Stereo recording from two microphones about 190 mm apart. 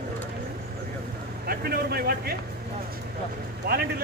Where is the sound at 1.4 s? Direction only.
55° right (ahead or behind).